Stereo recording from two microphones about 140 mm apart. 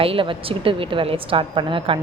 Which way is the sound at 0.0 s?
40° right (ahead or behind).